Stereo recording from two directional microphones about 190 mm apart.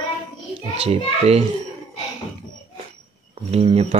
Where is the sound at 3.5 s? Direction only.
35° right (ahead or behind).